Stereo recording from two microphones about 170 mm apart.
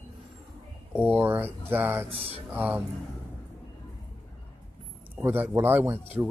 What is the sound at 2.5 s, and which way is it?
Speech, 10° right (ahead or behind).